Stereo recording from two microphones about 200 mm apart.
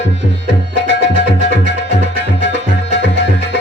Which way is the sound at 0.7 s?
65° left (ahead or behind).